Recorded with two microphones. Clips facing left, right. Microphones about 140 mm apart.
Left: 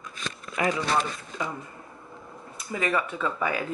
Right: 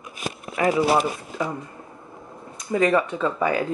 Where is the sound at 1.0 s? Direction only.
5° right (ahead or behind).